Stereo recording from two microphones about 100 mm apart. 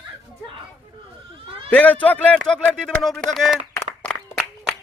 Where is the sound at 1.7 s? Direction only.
15° left (ahead or behind).